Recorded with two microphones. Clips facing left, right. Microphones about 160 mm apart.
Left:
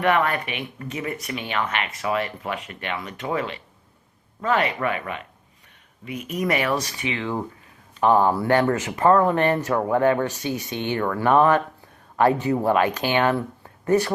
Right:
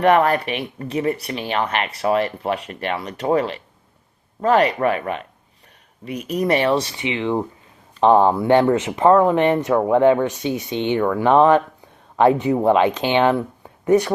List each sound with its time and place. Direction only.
0.0 s speech: 35° right (ahead or behind); by 14.1 s 15° right (ahead or behind)